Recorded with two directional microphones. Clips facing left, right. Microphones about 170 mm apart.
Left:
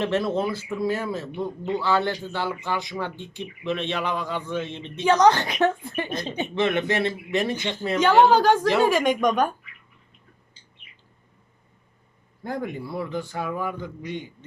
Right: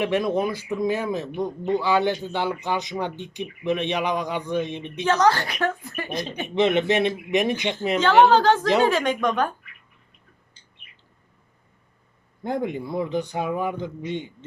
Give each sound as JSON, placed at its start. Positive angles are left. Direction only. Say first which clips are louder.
{"t": 0.0, "sound": "speech", "louder": "right 1 dB", "side_deg": -15}
{"t": 5.0, "sound": "a woman's voice", "louder": "left 2 dB", "side_deg": 15}
{"t": 6.5, "sound": "speech", "louder": "right 4 dB", "side_deg": -20}
{"t": 8.3, "sound": "a woman's voice", "louder": "even", "side_deg": 10}
{"t": 12.4, "sound": "a man's voice", "louder": "right 4 dB", "side_deg": -20}